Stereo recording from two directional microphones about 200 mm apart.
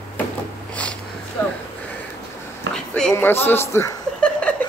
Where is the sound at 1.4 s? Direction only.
10° left (ahead or behind).